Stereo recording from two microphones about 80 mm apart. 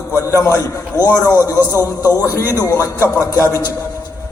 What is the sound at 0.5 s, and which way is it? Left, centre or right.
Speech, right.